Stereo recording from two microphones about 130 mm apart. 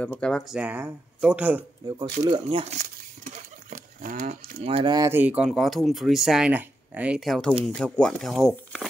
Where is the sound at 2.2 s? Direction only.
40° right (ahead or behind).